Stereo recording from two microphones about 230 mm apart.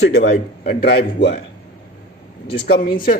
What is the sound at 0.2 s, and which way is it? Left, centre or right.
A man's voice, left.